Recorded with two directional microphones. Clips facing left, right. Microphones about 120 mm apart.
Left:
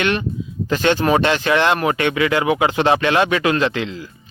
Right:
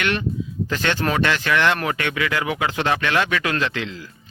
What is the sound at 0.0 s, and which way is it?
Speech, 25° left (ahead or behind).